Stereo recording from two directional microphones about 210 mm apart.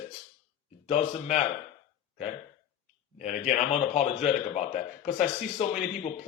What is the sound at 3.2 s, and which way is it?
A man's voice, 35° left (ahead or behind).